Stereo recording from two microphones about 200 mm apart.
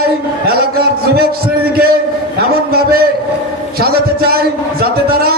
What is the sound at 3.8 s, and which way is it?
Speech, 50° right (ahead or behind).